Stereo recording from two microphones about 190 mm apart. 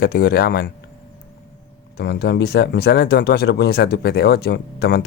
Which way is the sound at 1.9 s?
60° left (ahead or behind).